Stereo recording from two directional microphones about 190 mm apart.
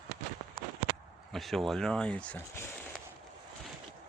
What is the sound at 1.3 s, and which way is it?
Speech, centre (ahead or behind).